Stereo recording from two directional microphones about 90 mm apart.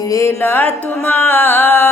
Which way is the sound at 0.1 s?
30° left (ahead or behind).